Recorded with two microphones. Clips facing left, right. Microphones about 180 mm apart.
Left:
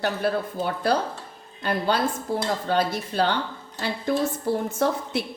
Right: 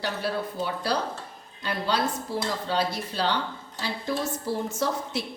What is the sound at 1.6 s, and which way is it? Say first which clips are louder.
Speech: left 3 dB; 50° left (ahead or behind).